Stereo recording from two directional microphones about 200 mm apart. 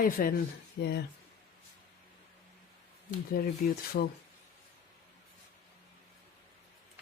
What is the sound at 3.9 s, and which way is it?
Speech, 50° left (ahead or behind).